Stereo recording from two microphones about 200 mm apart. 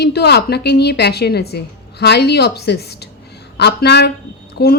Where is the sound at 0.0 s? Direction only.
55° left (ahead or behind).